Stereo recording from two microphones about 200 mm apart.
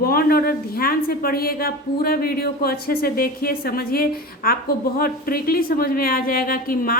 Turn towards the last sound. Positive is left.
turn(degrees=45)  # may be behind; listen again after turning